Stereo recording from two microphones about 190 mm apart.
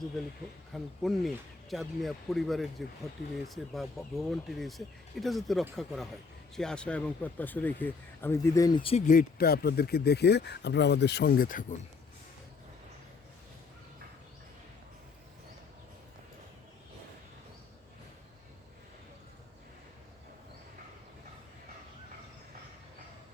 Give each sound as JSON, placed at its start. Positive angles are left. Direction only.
{"t": 0.7, "sound": "speech", "side_deg": 0}